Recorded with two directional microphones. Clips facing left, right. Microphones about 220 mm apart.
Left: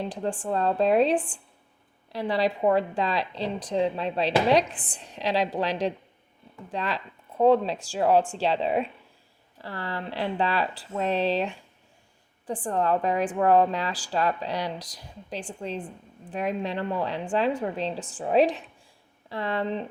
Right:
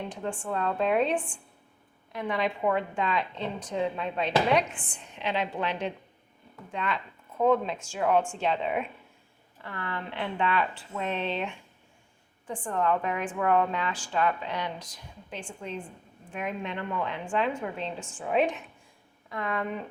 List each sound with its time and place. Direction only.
0.0 s a woman's voice: 35° left (ahead or behind)